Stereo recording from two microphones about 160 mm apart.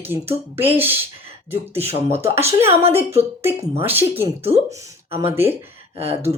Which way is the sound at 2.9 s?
15° right (ahead or behind).